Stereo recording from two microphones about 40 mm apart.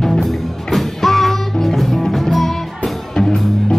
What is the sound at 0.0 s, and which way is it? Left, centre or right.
Music, centre.